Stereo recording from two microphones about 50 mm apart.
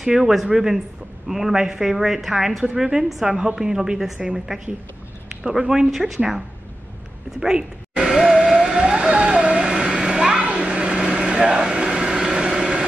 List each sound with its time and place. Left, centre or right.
0.0 s speech: centre
5.4 s a woman's voice: centre
7.3 s a woman's voice: centre
8.1 s music: centre
8.8 s a sound: centre